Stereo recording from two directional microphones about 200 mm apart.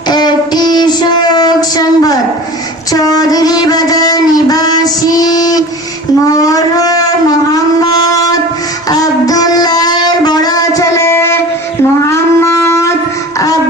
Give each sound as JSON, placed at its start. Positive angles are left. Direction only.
{"t": 0.1, "sound": "music", "side_deg": 20}
{"t": 6.2, "sound": "a sound", "side_deg": 15}
{"t": 7.5, "sound": "wind instrument", "side_deg": 20}
{"t": 8.9, "sound": "music", "side_deg": 20}
{"t": 12.0, "sound": "shofar", "side_deg": 15}